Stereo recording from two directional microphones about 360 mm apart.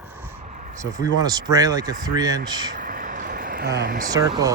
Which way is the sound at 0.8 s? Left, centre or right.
Centre.